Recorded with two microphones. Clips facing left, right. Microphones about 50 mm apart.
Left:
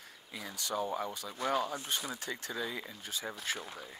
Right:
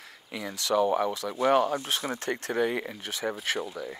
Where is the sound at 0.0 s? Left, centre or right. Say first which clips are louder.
Right 8 dB; right.